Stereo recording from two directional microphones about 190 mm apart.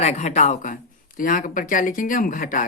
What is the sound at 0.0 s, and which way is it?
Speech, 35° left (ahead or behind).